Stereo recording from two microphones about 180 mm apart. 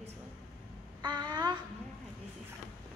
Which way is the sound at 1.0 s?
25° right (ahead or behind).